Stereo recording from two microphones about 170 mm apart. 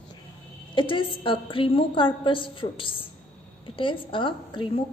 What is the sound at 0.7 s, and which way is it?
A woman's voice, 30° left (ahead or behind).